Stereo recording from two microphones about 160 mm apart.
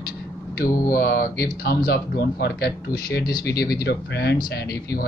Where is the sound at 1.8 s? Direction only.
80° left.